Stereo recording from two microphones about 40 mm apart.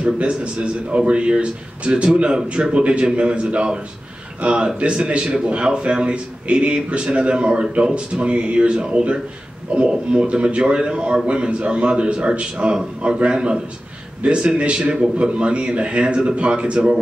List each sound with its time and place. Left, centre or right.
0.0 s a man's voice: right